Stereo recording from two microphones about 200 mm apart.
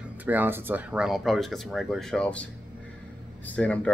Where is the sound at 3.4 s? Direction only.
5° left (ahead or behind).